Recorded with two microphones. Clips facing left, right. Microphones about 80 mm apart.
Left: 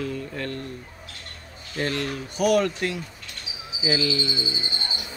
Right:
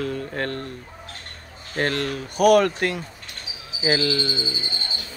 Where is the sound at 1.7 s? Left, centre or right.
Right.